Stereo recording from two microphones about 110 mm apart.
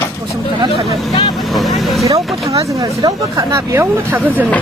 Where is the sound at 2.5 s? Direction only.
30° right (ahead or behind).